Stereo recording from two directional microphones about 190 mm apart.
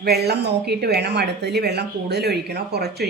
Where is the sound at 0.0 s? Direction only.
60° right (ahead or behind).